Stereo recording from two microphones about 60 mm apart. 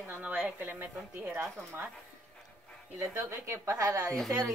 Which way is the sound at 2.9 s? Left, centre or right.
Right.